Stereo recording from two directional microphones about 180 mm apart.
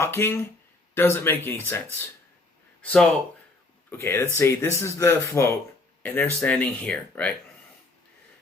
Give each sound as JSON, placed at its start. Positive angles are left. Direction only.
{"t": 0.0, "sound": "speech", "side_deg": 15}
{"t": 2.8, "sound": "speech", "side_deg": 5}